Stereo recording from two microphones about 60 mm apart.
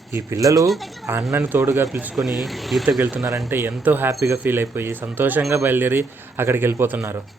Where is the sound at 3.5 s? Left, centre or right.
Right.